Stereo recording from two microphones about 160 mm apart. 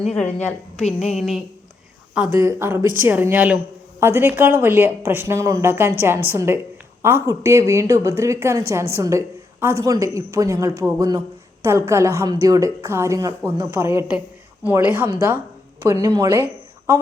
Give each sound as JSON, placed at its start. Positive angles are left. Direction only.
{"t": 0.1, "sound": "a woman's voice", "side_deg": 10}
{"t": 2.1, "sound": "a woman's voice", "side_deg": -10}